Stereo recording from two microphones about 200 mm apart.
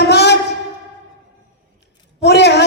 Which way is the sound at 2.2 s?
55° left (ahead or behind).